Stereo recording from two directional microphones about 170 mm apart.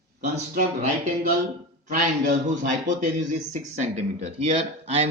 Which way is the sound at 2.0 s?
65° right (ahead or behind).